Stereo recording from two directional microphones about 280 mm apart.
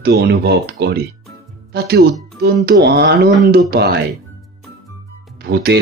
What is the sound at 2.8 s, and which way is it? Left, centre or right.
Speech, right.